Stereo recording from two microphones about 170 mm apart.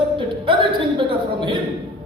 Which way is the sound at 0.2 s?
30° right (ahead or behind).